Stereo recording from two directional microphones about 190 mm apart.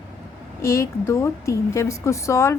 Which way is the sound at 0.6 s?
15° left (ahead or behind).